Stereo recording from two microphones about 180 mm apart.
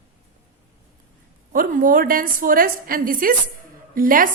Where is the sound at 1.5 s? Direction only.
50° right (ahead or behind).